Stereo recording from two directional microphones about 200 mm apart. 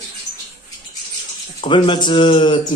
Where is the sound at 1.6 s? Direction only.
25° left (ahead or behind).